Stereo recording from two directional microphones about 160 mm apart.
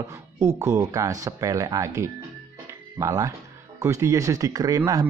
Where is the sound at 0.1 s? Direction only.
20° right (ahead or behind).